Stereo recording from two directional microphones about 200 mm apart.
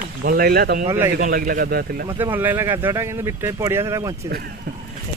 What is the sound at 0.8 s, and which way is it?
Speech, 15° right (ahead or behind).